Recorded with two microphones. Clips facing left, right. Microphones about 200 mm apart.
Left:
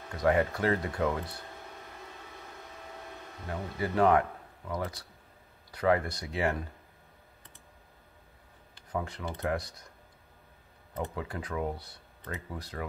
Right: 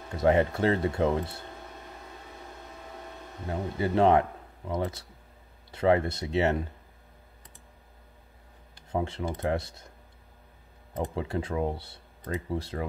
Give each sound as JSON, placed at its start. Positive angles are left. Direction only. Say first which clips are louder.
{"t": 0.1, "sound": "speech", "louder": "right 3 dB", "side_deg": -25}
{"t": 3.4, "sound": "a man's voice", "louder": "right 4 dB", "side_deg": -25}
{"t": 8.9, "sound": "speech", "louder": "right 5 dB", "side_deg": -25}
{"t": 11.1, "sound": "speech", "louder": "right 7 dB", "side_deg": -25}